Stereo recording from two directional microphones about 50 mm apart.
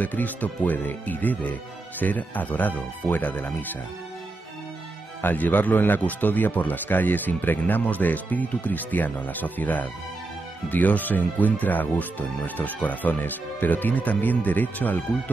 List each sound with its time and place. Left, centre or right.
0.0 s speech: left
5.2 s speech: left